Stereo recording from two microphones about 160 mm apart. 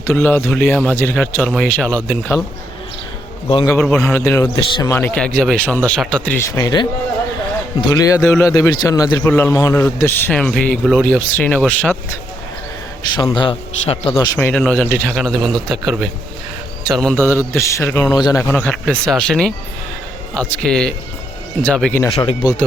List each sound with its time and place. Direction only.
0.0 s a man's voice: 15° left (ahead or behind)
3.8 s a man's voice: 15° left (ahead or behind)
6.6 s a man's voice: 25° left (ahead or behind)
13.1 s a man's voice: 30° left (ahead or behind)
14.3 s a man's voice: 10° left (ahead or behind)
18.5 s speech: 10° left (ahead or behind)
22.1 s a man's voice: 35° left (ahead or behind)